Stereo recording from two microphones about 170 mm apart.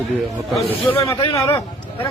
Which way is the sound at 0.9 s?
15° left (ahead or behind).